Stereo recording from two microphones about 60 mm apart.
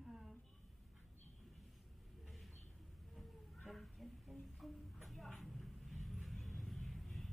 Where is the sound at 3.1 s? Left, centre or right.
Centre.